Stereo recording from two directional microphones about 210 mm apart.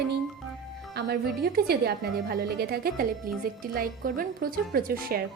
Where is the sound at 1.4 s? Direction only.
50° right (ahead or behind).